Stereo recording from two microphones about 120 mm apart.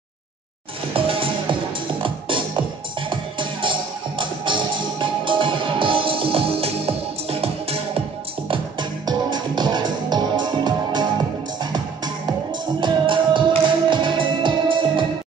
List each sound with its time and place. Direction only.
0.9 s music: 50° right (ahead or behind)
8.5 s music: 40° right (ahead or behind)